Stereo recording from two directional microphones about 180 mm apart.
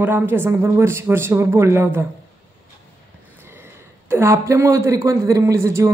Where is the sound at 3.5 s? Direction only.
15° right (ahead or behind).